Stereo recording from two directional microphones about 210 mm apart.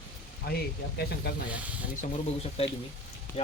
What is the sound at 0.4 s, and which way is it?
Speech, 50° left (ahead or behind).